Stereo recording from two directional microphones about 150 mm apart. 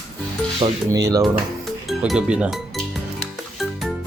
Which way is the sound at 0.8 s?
20° right (ahead or behind).